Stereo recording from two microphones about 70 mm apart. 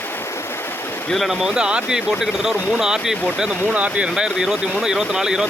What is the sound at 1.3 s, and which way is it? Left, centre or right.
Speech, centre.